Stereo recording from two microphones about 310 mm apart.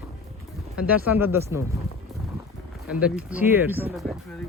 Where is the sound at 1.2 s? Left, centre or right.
Centre.